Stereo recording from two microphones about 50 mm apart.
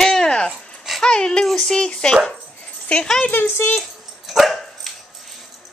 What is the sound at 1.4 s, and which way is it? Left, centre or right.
Speech, centre.